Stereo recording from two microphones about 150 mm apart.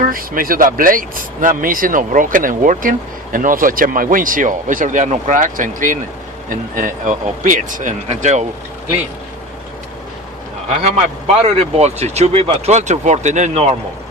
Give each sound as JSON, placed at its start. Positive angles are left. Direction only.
{"t": 0.1, "sound": "speech", "side_deg": -70}
{"t": 8.0, "sound": "speech", "side_deg": -50}
{"t": 10.7, "sound": "speech", "side_deg": -45}